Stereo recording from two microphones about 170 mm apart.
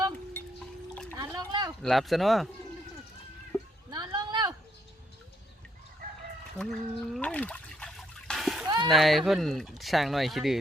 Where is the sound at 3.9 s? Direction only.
25° right (ahead or behind).